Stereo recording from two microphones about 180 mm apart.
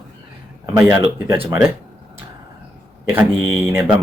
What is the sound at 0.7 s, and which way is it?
Speech, 15° right (ahead or behind).